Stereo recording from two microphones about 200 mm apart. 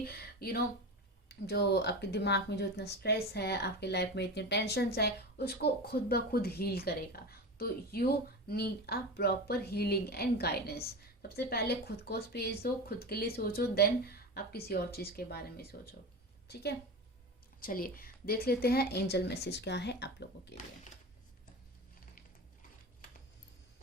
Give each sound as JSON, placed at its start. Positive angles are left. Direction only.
{"t": 0.0, "sound": "a sound", "side_deg": 50}
{"t": 1.3, "sound": "a woman's voice", "side_deg": 55}
{"t": 17.6, "sound": "a woman's voice", "side_deg": 45}